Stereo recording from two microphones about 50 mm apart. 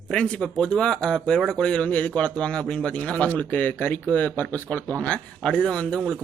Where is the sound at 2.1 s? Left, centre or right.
Left.